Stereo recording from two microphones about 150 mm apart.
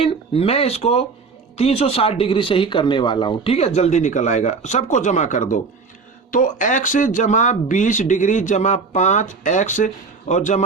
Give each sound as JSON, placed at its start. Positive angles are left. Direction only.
{"t": 0.0, "sound": "speech", "side_deg": 40}